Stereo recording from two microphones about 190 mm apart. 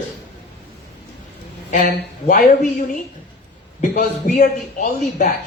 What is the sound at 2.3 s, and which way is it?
Speech, 50° left (ahead or behind).